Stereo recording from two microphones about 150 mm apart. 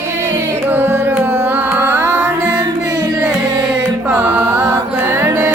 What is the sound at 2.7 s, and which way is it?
Carnatic music, 25° right (ahead or behind).